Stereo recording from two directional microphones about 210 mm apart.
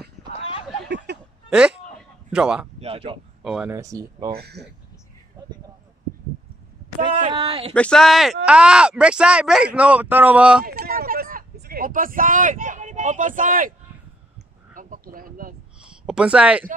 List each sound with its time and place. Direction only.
0.3 s a sound: 25° left (ahead or behind)
0.8 s a sound: 55° right (ahead or behind)
1.5 s speech: 5° right (ahead or behind)
2.8 s speech: 25° right (ahead or behind)
3.4 s speech: centre (ahead or behind)
3.7 s speech: 15° right (ahead or behind)
4.3 s speech: 50° right (ahead or behind)
7.2 s speech: 25° right (ahead or behind)
7.7 s speech: 5° left (ahead or behind)
10.6 s a sound: 45° right (ahead or behind)
16.1 s speech: 5° right (ahead or behind)